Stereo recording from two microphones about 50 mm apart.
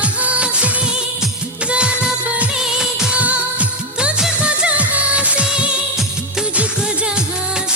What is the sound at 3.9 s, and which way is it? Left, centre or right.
Music of bollywood, centre.